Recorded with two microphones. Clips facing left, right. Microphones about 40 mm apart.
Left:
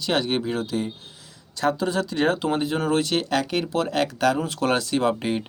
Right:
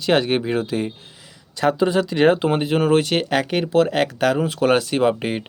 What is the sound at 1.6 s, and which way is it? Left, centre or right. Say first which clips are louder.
Speech: right 5 dB; right.